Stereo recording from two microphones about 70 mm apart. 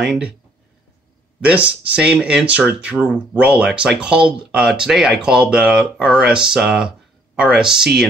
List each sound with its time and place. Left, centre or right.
0.0 s speech: centre
1.4 s speech: centre